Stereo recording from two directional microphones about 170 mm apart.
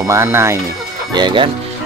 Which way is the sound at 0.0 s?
15° right (ahead or behind).